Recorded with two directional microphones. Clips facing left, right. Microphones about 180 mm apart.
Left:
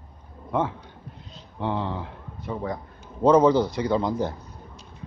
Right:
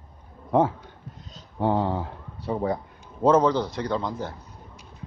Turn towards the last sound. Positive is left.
turn(degrees=10)  # may be behind; listen again after turning